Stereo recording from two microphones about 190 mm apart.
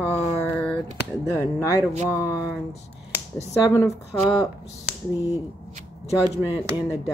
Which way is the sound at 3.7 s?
15° left (ahead or behind).